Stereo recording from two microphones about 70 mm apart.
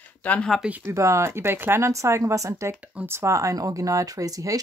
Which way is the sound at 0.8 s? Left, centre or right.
Right.